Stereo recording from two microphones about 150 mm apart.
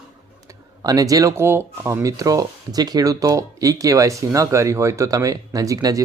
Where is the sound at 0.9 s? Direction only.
20° right (ahead or behind).